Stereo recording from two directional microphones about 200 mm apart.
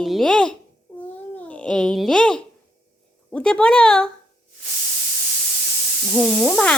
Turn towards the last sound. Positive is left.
turn(degrees=5)  # may be behind; listen again after turning